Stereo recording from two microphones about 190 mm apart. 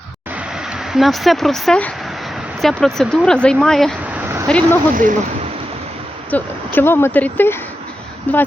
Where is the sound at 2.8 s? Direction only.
Centre (ahead or behind).